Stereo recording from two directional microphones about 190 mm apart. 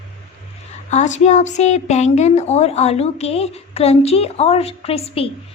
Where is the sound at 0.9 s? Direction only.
40° left (ahead or behind).